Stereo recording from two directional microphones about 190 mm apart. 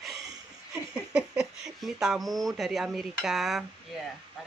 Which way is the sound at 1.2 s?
Centre (ahead or behind).